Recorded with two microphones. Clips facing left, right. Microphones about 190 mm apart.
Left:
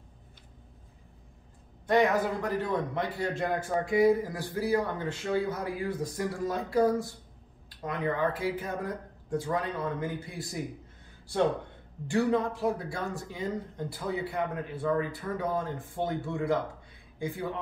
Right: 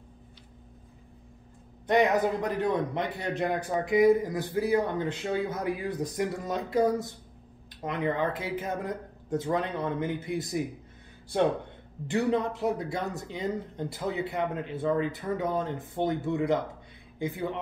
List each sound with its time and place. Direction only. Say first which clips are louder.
1.9 s speech: right 1 dB; 20° right (ahead or behind)
12.1 s speech: even; 20° right (ahead or behind)